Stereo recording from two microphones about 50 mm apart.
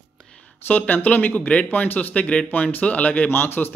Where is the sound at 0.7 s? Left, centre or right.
Left.